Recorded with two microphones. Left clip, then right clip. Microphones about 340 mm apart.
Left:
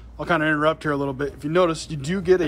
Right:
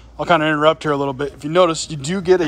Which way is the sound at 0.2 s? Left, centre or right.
Centre.